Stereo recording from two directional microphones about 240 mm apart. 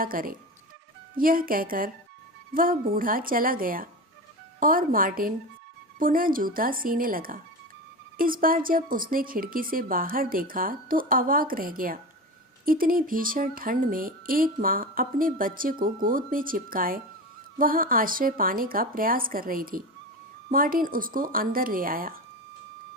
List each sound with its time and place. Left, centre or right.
0.0 s speech: right